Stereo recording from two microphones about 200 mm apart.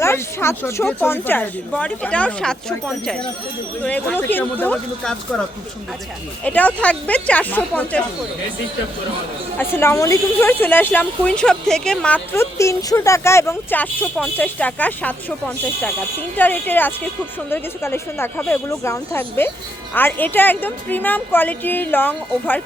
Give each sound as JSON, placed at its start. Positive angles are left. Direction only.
{"t": 0.0, "sound": "speech", "side_deg": 15}
{"t": 6.4, "sound": "speech", "side_deg": 5}
{"t": 9.6, "sound": "speech", "side_deg": 10}